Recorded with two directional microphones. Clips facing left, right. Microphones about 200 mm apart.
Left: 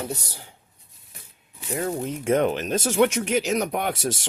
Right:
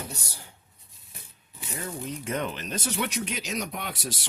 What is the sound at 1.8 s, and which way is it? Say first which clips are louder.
Speech: left 9 dB; 50° left (ahead or behind).